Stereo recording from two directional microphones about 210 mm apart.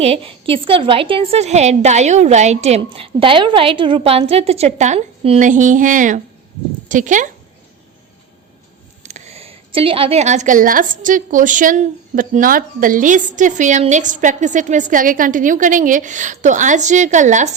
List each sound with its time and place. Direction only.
0.0 s a woman's voice: 30° right (ahead or behind)
9.0 s a woman's voice: 35° right (ahead or behind)